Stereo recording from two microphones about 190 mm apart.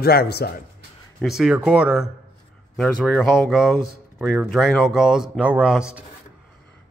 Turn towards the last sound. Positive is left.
turn(degrees=-5)  # may be behind; listen again after turning